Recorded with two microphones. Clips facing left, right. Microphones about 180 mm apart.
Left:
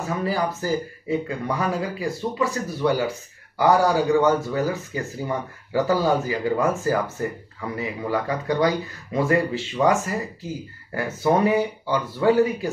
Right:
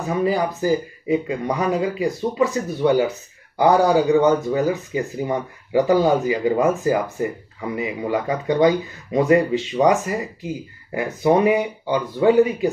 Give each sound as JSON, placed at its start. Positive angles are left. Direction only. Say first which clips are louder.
{"t": 0.0, "sound": "speech", "louder": "right 4 dB", "side_deg": -15}